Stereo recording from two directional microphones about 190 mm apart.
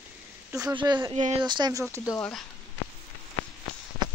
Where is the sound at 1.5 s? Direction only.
20° right (ahead or behind).